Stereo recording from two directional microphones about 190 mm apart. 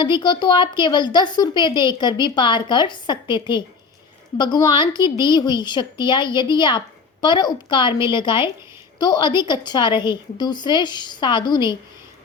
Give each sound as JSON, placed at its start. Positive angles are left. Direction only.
{"t": 0.0, "sound": "a woman's voice", "side_deg": 25}